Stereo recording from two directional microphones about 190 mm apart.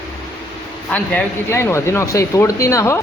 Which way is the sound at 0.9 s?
10° left (ahead or behind).